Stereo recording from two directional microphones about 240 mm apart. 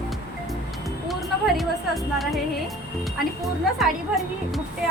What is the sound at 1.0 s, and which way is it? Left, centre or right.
Speech, centre.